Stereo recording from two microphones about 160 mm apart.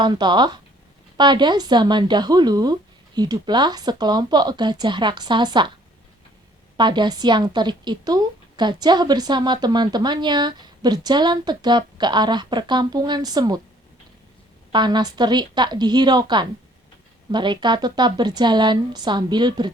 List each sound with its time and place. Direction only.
0.0 s a woman's voice: 25° right (ahead or behind)
6.7 s a woman's voice: 30° right (ahead or behind)
14.7 s a woman's voice: 30° right (ahead or behind)